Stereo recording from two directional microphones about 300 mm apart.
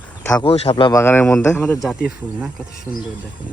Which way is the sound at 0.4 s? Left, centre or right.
Centre.